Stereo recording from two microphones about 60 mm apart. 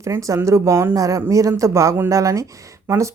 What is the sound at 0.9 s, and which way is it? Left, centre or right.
Speech, right.